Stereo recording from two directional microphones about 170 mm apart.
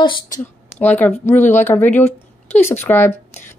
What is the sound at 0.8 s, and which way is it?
Speech, 10° left (ahead or behind).